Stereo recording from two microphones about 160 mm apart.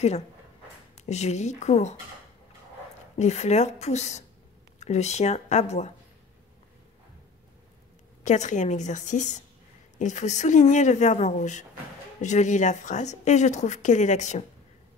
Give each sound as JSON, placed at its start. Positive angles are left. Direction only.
{"t": 0.9, "sound": "speech", "side_deg": 45}
{"t": 3.2, "sound": "speech", "side_deg": 45}
{"t": 8.2, "sound": "speech", "side_deg": 50}